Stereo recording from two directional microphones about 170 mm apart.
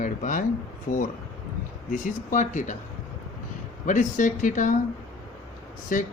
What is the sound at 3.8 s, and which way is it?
Speech, 50° left (ahead or behind).